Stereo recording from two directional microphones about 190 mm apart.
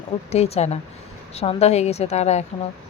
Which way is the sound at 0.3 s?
35° left (ahead or behind).